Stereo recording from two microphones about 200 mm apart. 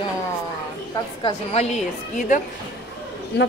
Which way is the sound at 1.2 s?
30° left (ahead or behind).